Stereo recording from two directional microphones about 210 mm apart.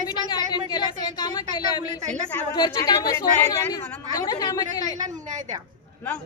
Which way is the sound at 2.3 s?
20° left (ahead or behind).